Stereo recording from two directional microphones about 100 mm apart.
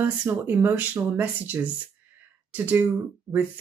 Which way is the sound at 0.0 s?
15° right (ahead or behind).